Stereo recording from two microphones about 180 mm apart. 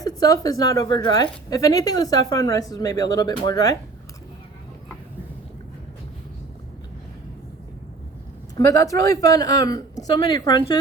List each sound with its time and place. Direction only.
0.0 s a woman's voice: 20° left (ahead or behind)
8.5 s a woman's voice: 20° left (ahead or behind)